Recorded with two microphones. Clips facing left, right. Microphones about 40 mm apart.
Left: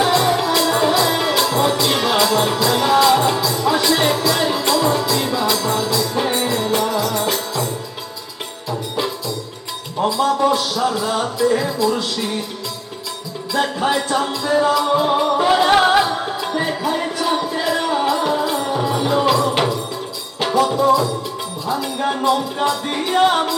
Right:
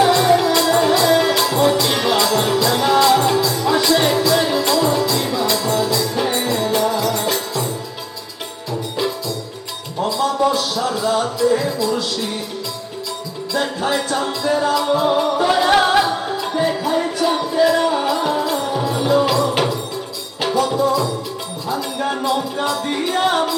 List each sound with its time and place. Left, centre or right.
0.0 s music: centre
10.1 s music: centre
13.7 s music: centre
14.2 s music: centre